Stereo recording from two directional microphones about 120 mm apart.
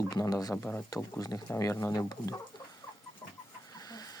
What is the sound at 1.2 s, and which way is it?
Speech, 30° left (ahead or behind).